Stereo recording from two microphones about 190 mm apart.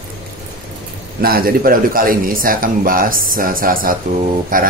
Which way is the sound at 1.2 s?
50° right (ahead or behind).